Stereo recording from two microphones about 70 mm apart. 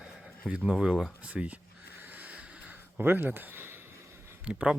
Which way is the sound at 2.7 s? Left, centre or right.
Right.